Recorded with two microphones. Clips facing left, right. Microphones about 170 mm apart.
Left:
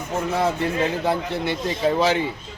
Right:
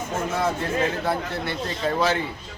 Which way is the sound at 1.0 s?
15° left (ahead or behind).